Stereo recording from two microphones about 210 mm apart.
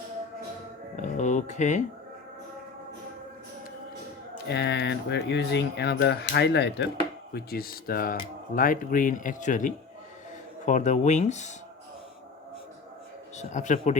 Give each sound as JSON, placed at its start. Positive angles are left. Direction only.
{"t": 0.9, "sound": "speech", "side_deg": 35}
{"t": 4.4, "sound": "speech", "side_deg": 55}
{"t": 13.3, "sound": "speech", "side_deg": 35}